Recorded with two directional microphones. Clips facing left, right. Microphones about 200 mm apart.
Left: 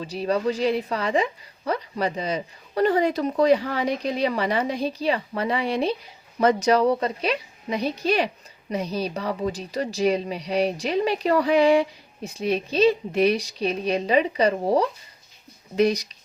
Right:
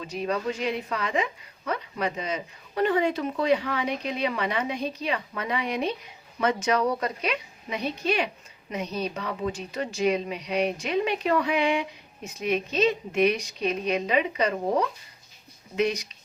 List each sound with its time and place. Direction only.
0.0 s speech: 35° left (ahead or behind)